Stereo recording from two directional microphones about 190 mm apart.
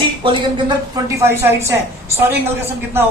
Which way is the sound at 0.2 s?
25° right (ahead or behind).